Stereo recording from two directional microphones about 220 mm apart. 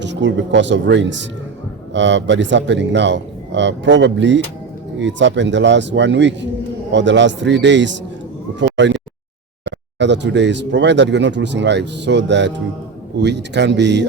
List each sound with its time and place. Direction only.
0.0 s a man's voice: 55° right (ahead or behind)
8.5 s a sound: 55° right (ahead or behind)
9.6 s speech: 55° right (ahead or behind)